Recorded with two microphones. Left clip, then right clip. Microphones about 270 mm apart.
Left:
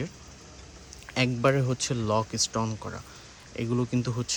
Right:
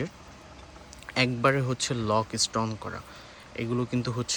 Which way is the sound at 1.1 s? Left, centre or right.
Centre.